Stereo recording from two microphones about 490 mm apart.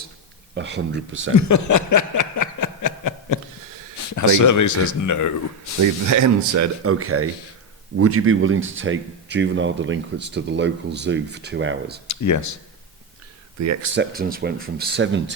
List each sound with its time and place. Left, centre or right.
0.5 s speech: right
1.4 s a sound: left
4.1 s speech: left
6.1 s speech: right
12.0 s speech: left
13.6 s speech: right
13.9 s speech: centre